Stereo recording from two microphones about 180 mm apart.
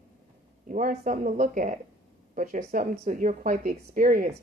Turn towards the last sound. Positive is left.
turn(degrees=-50)  # may be behind; listen again after turning